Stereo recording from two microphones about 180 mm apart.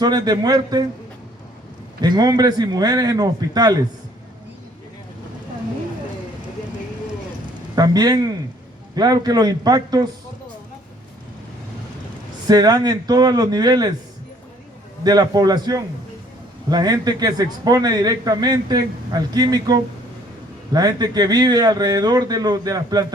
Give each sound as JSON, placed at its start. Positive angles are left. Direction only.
{"t": 0.0, "sound": "a man's voice", "side_deg": -20}
{"t": 2.0, "sound": "a man's voice", "side_deg": -25}
{"t": 7.8, "sound": "a man's voice", "side_deg": -20}
{"t": 12.5, "sound": "a man's voice", "side_deg": -20}
{"t": 15.0, "sound": "a man's voice", "side_deg": -20}